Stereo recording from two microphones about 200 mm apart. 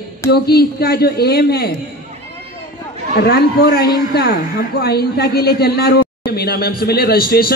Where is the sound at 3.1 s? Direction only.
50° left (ahead or behind).